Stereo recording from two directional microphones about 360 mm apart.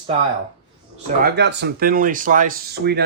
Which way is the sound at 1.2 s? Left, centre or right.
Right.